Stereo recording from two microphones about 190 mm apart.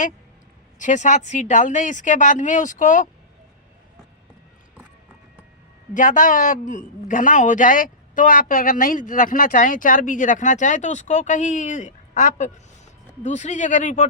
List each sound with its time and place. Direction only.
0.8 s speech: 40° left (ahead or behind)
5.9 s a man's voice: 45° left (ahead or behind)